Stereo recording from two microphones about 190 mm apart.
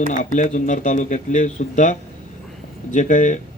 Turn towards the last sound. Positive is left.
turn(degrees=40)  # may be behind; listen again after turning